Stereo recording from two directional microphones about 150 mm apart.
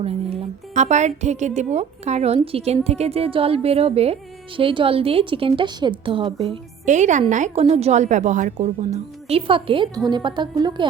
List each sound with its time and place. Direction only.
0.0 s a woman's voice: 40° right (ahead or behind)
6.8 s a woman's voice: 55° right (ahead or behind); by 10.8 s 30° right (ahead or behind)